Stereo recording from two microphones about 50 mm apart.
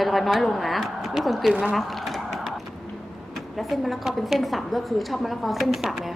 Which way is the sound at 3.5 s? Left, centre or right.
Centre.